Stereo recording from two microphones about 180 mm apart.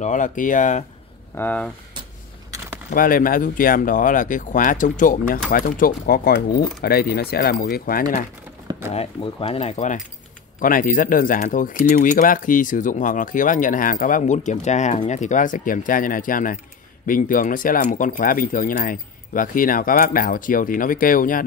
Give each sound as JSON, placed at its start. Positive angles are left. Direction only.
{"t": 0.0, "sound": "speech", "side_deg": 45}
{"t": 1.3, "sound": "speech", "side_deg": 10}
{"t": 2.9, "sound": "speech", "side_deg": 50}
{"t": 8.9, "sound": "speech", "side_deg": 35}